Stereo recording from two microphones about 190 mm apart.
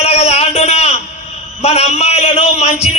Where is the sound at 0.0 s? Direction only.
35° left (ahead or behind).